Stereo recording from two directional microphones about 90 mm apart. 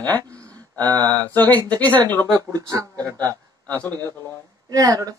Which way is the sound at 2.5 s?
40° right (ahead or behind).